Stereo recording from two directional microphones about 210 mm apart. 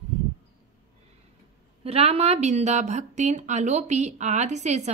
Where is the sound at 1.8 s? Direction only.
30° right (ahead or behind).